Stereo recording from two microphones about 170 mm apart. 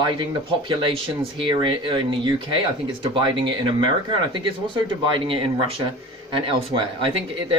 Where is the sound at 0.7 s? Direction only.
30° right (ahead or behind).